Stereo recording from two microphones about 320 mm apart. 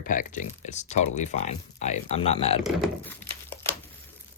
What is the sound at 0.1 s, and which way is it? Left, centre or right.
Speech, left.